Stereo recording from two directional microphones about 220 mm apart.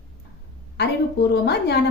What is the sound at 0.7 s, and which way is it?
A woman's voice, 50° left (ahead or behind).